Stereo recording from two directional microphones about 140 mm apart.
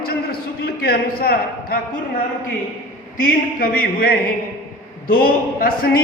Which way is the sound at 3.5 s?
90° left.